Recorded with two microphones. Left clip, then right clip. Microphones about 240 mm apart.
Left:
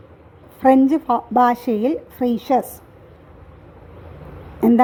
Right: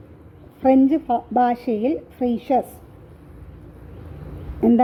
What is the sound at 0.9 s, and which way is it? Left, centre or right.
A woman's voice, left.